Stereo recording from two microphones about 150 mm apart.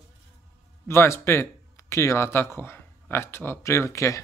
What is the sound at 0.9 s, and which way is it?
Speech, 15° left (ahead or behind).